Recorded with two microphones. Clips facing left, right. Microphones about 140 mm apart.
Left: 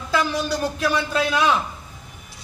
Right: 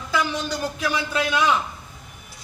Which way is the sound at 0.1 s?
Centre (ahead or behind).